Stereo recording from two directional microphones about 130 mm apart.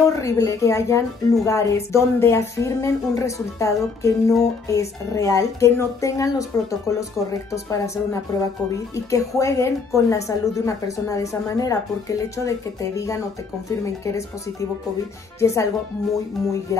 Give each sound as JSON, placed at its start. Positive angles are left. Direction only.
{"t": 0.0, "sound": "speech", "side_deg": 25}